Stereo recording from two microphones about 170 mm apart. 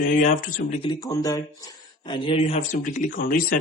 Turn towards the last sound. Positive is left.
turn(degrees=50)  # may be behind; listen again after turning